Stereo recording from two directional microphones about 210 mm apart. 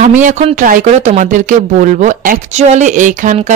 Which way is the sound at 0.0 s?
35° right (ahead or behind).